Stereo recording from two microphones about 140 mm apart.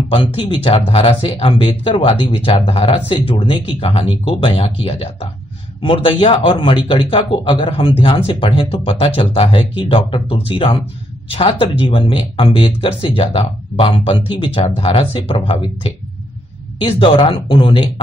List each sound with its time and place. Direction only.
0.1 s speech: 40° left (ahead or behind)